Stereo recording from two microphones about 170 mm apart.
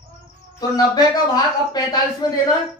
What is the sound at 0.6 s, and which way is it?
Speech, 20° left (ahead or behind).